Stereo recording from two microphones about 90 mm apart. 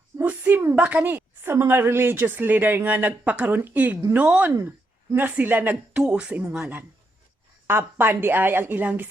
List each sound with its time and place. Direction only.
0.3 s a woman's voice: 20° right (ahead or behind)
7.7 s a woman's voice: 25° right (ahead or behind)